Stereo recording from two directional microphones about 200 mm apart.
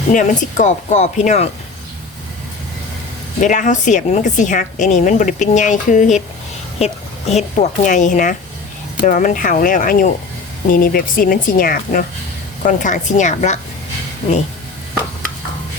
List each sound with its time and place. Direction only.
0.1 s a woman's voice: 40° left (ahead or behind)
3.4 s a woman's voice: 40° left (ahead or behind)